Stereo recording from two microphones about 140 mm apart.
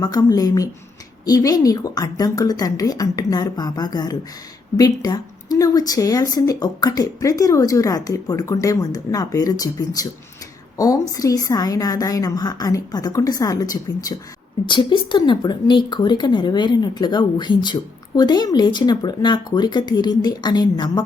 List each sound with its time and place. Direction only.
0.0 s a woman's voice: 30° left (ahead or behind)